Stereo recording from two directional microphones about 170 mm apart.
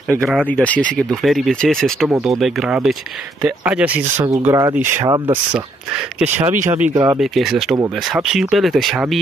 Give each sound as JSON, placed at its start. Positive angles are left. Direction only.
{"t": 0.1, "sound": "speech", "side_deg": 0}
{"t": 6.1, "sound": "speech", "side_deg": -10}
{"t": 7.2, "sound": "speech", "side_deg": 0}